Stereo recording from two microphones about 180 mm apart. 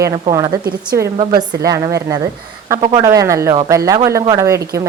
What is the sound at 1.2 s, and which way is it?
A woman's voice, 20° right (ahead or behind).